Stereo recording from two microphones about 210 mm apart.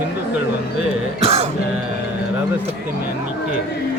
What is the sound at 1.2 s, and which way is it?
Music, 30° right (ahead or behind).